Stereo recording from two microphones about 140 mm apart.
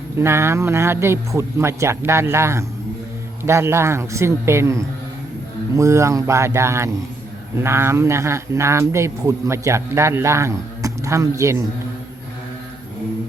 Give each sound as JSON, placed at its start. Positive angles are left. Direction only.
{"t": 0.2, "sound": "speech", "side_deg": -20}